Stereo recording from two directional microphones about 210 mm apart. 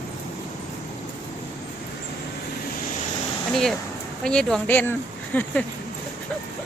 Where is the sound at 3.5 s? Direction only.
Centre (ahead or behind).